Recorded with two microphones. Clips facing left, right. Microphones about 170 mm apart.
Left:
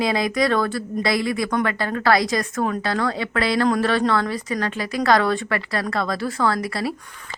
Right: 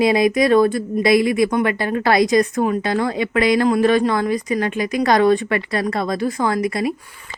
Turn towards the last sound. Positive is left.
turn(degrees=-20)  # may be behind; listen again after turning